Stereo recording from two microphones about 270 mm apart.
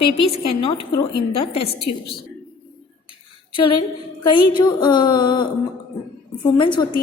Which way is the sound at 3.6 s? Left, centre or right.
Centre.